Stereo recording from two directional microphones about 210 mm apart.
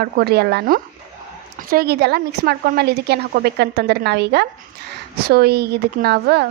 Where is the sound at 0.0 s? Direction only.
50° right (ahead or behind).